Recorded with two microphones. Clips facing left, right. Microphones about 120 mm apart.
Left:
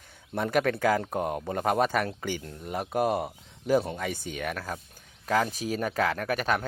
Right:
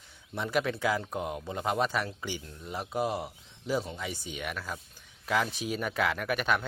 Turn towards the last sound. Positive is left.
turn(degrees=40)  # may be behind; listen again after turning